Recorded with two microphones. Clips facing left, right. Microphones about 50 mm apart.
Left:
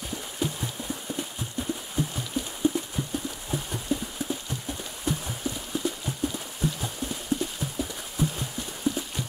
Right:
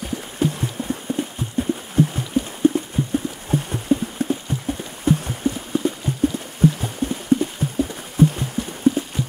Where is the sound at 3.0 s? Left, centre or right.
Centre.